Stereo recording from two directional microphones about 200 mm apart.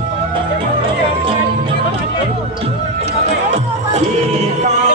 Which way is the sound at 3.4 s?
35° right (ahead or behind).